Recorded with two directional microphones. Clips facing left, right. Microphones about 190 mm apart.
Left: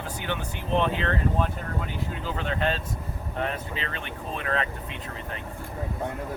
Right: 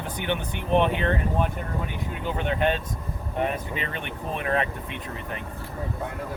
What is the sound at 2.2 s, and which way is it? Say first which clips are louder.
Speech: right 4 dB; 15° right (ahead or behind).